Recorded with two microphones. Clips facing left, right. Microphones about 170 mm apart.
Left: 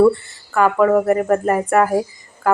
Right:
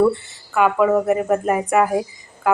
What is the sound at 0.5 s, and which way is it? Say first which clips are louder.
A woman's voice: left 2 dB; 5° right (ahead or behind).